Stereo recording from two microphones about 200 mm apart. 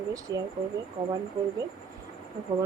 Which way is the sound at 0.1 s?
15° right (ahead or behind).